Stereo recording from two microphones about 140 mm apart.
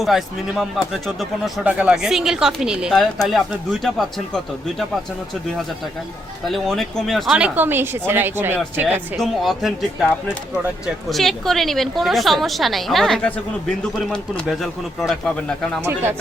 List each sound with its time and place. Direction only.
0.0 s speech: centre (ahead or behind)
6.5 s speech: centre (ahead or behind)
9.1 s speech: centre (ahead or behind)
15.8 s speech: 15° right (ahead or behind)